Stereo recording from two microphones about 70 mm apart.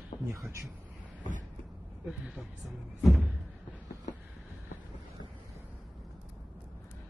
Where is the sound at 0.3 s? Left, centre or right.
Right.